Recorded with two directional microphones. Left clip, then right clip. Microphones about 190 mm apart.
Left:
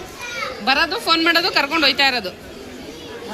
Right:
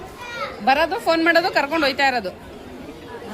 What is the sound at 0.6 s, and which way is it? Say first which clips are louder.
Speech: right 1 dB; 35° right (ahead or behind).